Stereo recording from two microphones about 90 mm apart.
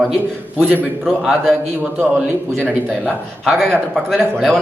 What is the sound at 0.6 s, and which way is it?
Speech, 20° right (ahead or behind).